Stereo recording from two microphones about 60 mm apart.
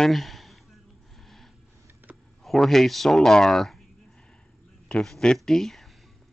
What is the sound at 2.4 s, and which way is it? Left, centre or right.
Speech, centre.